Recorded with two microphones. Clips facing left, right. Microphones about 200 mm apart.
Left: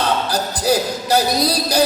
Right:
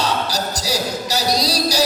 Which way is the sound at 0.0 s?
55° left (ahead or behind).